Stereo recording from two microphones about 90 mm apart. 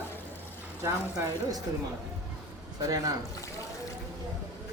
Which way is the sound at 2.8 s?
40° right (ahead or behind).